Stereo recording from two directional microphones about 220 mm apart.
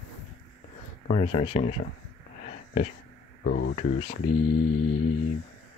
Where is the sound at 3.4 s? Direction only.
50° left (ahead or behind).